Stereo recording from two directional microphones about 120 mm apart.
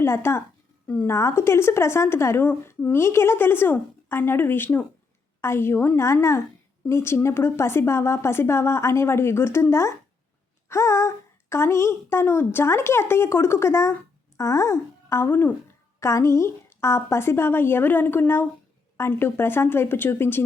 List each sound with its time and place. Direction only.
0.0 s a woman's voice: 20° left (ahead or behind)
1.1 s speech: 25° left (ahead or behind)